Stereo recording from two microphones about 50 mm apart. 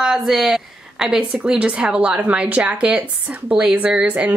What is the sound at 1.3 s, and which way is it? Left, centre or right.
A woman's voice, right.